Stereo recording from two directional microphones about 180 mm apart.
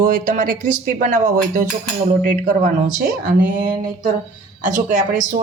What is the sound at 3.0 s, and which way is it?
Speech, 50° right (ahead or behind).